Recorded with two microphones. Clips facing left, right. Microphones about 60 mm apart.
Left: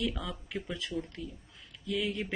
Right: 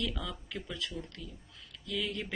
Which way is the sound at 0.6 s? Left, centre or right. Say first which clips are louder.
Left 4 dB; left.